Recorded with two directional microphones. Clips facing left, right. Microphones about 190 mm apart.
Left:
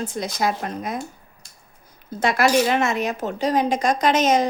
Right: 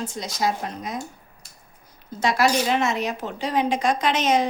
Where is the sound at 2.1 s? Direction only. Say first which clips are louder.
Left 3 dB; 55° left (ahead or behind).